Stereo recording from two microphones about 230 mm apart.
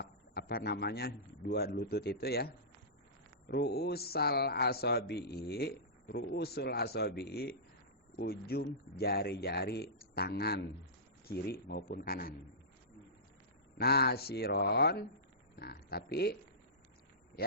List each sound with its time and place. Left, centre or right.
0.0 s a man's voice: left
3.5 s speech: left
13.7 s speech: left